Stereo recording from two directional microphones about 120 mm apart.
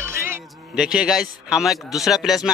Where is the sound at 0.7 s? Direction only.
5° right (ahead or behind).